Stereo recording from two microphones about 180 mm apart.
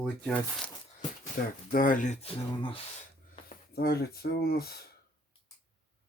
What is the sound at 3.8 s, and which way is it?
Speech, 60° left (ahead or behind).